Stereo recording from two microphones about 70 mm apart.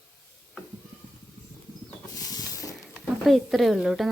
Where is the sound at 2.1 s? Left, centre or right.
Left.